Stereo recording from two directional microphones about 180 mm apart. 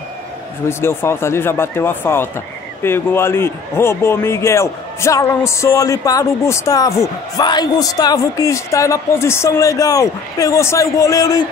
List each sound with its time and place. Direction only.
0.7 s a man's voice: 15° left (ahead or behind)